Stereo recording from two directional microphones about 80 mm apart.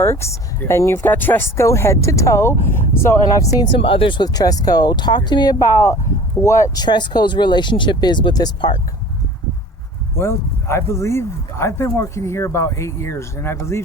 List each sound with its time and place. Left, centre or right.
0.0 s speech: left
3.6 s speech: left
4.3 s speech: left
5.5 s speech: left
6.7 s speech: left
10.2 s speech: left